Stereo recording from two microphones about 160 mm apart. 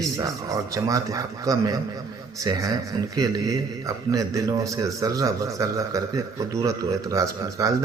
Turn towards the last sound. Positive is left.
turn(degrees=-20)  # may be behind; listen again after turning